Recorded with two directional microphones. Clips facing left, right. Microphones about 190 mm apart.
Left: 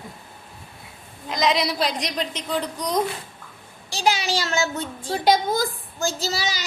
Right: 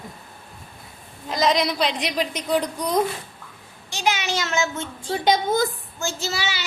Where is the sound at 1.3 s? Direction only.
Centre (ahead or behind).